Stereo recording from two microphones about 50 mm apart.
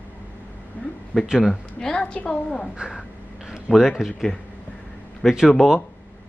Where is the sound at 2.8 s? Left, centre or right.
Centre.